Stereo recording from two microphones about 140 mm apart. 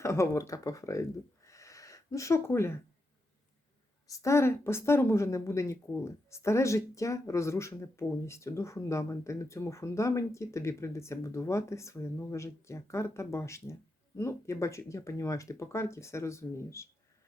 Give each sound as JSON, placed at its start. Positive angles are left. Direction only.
{"t": 0.0, "sound": "speech", "side_deg": 20}
{"t": 1.5, "sound": "gasp", "side_deg": 20}
{"t": 4.0, "sound": "speech", "side_deg": 20}